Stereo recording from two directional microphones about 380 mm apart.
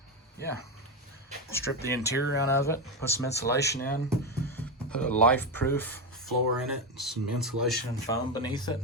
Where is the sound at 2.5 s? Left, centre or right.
Centre.